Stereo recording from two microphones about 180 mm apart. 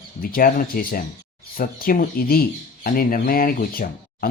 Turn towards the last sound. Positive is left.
turn(degrees=55)  # may be behind; listen again after turning